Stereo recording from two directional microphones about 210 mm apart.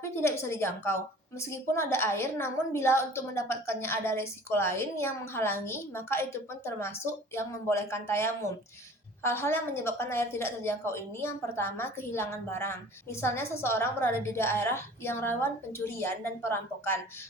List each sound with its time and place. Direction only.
0.0 s a woman's voice: 10° left (ahead or behind)